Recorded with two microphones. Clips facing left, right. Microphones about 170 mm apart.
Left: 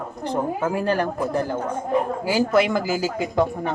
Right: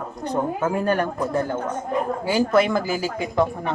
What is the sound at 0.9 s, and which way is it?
Speech, 30° left (ahead or behind).